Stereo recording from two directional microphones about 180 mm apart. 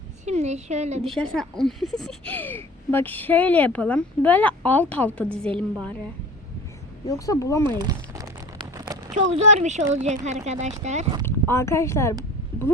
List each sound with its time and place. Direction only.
0.3 s a woman's voice: 40° right (ahead or behind)
1.0 s speech: 5° left (ahead or behind)
7.3 s speech: 15° left (ahead or behind)
7.6 s speech: 20° right (ahead or behind)
8.7 s a sound: 20° right (ahead or behind)
9.3 s speech: 40° right (ahead or behind)
11.3 s speech: 15° left (ahead or behind)